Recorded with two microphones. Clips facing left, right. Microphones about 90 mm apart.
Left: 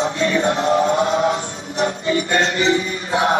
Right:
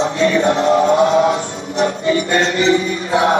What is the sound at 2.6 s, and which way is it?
Music, 35° right (ahead or behind).